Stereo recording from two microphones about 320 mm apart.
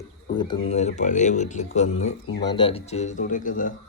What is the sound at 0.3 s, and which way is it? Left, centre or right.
A man's voice, centre.